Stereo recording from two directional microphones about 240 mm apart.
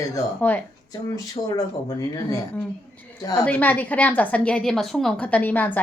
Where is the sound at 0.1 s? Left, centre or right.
Centre.